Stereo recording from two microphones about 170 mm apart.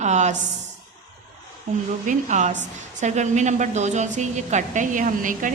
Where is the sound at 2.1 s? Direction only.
45° right (ahead or behind).